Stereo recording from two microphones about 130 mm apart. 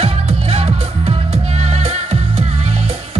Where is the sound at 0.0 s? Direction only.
50° right (ahead or behind).